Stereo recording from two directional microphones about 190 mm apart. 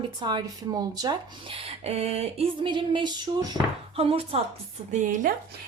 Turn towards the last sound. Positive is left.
turn(degrees=-45)  # may be behind; listen again after turning